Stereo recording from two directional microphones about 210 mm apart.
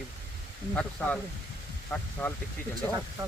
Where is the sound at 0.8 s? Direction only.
5° left (ahead or behind).